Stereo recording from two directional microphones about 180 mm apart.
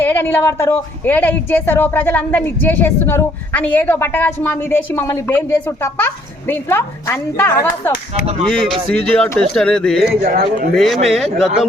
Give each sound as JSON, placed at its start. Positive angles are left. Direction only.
{"t": 0.0, "sound": "speech", "side_deg": 10}
{"t": 10.2, "sound": "speech", "side_deg": -55}
{"t": 10.8, "sound": "speech", "side_deg": 0}